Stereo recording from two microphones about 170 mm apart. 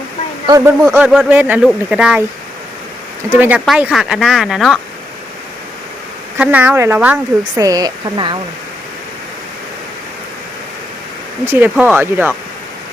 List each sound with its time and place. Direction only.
0.4 s speech: 20° right (ahead or behind)
0.8 s speech: 10° right (ahead or behind)
3.3 s speech: 10° right (ahead or behind)
6.4 s speech: 10° right (ahead or behind)
7.6 s speech: 20° right (ahead or behind)
11.5 s speech: 10° right (ahead or behind)